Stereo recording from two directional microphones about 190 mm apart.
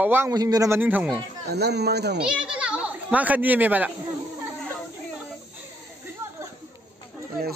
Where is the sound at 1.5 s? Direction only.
60° right (ahead or behind).